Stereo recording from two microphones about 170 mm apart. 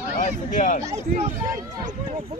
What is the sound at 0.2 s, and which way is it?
Speech, 50° left (ahead or behind).